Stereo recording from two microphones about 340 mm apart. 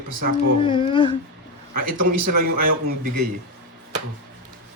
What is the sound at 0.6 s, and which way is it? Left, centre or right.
Speech, centre.